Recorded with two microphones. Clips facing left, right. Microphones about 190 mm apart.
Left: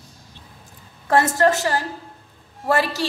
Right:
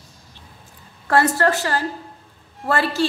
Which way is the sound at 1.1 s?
20° left (ahead or behind).